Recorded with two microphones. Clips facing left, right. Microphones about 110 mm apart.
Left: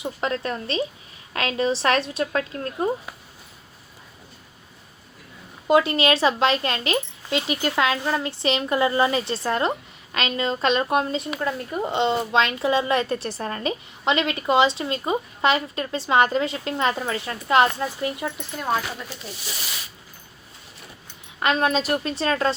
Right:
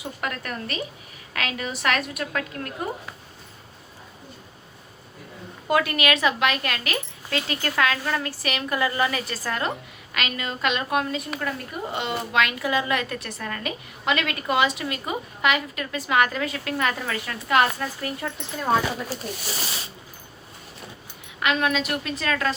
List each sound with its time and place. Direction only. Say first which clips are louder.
0.0 s a woman's voice: left 5 dB; 25° left (ahead or behind)
5.6 s a woman's voice: left 4 dB; 25° left (ahead or behind)
19.2 s speech: right 5 dB; 50° right (ahead or behind)
21.4 s a woman's voice: left 2 dB; 35° left (ahead or behind)